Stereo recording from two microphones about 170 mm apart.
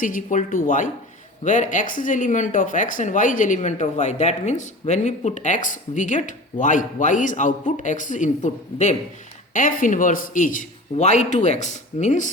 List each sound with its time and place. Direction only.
0.0 s speech: 50° left (ahead or behind)